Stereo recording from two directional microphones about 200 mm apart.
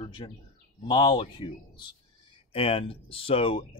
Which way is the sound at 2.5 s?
30° left (ahead or behind).